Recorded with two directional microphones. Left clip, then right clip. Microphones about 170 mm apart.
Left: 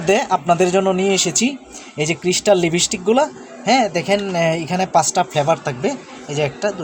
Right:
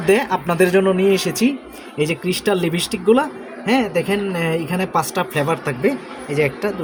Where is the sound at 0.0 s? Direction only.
35° left (ahead or behind).